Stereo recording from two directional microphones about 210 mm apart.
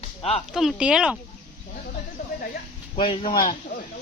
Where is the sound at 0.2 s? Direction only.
30° left (ahead or behind).